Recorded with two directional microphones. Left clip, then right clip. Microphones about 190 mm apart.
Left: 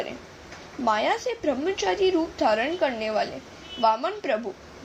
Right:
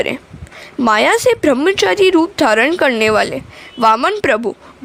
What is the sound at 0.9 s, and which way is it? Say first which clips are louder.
A woman's voice: right 12 dB; 55° right (ahead or behind).